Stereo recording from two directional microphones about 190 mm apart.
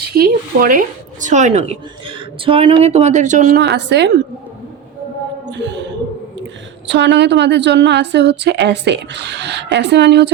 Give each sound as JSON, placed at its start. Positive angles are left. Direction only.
{"t": 0.2, "sound": "speech", "side_deg": -45}
{"t": 3.6, "sound": "a woman's voice", "side_deg": -65}
{"t": 5.5, "sound": "a sound", "side_deg": -65}
{"t": 6.8, "sound": "a woman's voice", "side_deg": -70}